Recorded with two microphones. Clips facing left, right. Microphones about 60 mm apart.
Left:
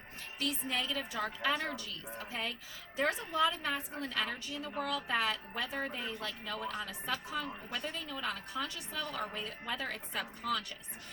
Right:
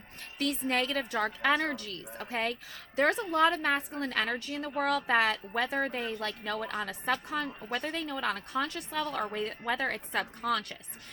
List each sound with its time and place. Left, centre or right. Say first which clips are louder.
0.3 s a woman's voice: right 6 dB; right